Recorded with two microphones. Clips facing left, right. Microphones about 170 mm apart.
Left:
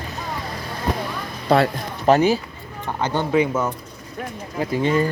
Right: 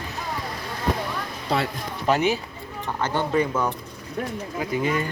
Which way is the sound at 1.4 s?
55° left (ahead or behind).